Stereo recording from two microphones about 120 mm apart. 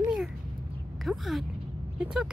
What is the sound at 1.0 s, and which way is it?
Speech, centre (ahead or behind).